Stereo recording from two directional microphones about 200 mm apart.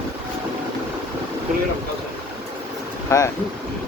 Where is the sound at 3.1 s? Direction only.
15° left (ahead or behind).